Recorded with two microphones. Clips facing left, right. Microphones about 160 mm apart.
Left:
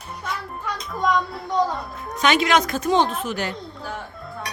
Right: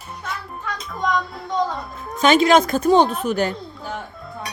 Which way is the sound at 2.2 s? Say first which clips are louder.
Right 5 dB; 35° right (ahead or behind).